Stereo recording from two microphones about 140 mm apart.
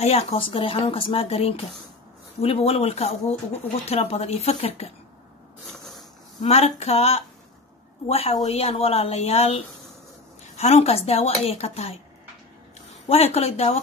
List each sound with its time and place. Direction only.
0.0 s speech: 45° left (ahead or behind)
6.4 s speech: 50° left (ahead or behind)
10.6 s speech: 45° left (ahead or behind)
13.1 s speech: 45° left (ahead or behind)